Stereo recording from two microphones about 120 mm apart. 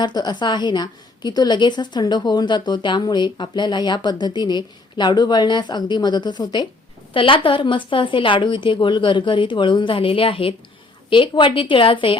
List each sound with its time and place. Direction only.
0.0 s a woman's voice: 35° left (ahead or behind)